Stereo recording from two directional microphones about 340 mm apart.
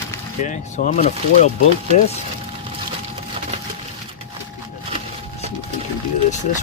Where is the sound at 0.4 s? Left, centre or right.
Left.